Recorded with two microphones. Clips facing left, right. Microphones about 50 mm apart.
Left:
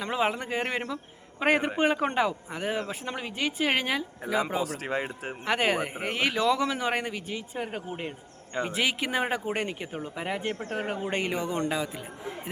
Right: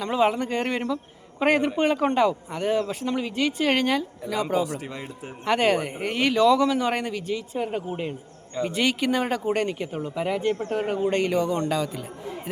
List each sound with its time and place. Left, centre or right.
0.0 s speech: centre
4.6 s speech: left
5.5 s speech: centre